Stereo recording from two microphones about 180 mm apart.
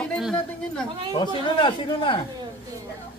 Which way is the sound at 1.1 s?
25° left (ahead or behind).